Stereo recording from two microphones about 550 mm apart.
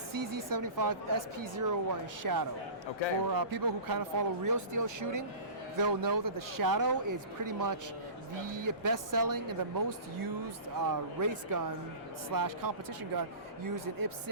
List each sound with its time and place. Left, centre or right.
0.1 s speech: right